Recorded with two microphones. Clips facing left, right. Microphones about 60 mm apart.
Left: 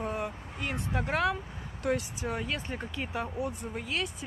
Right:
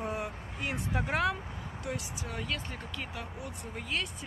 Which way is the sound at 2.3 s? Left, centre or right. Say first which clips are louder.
Left 3 dB; left.